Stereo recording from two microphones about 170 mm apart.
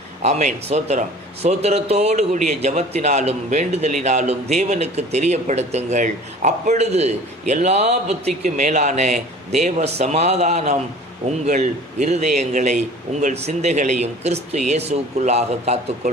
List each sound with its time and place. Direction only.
0.2 s a man's voice: 40° right (ahead or behind)